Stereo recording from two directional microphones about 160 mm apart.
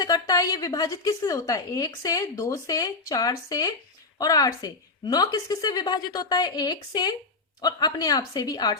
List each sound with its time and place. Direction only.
0.0 s a woman's voice: 25° left (ahead or behind)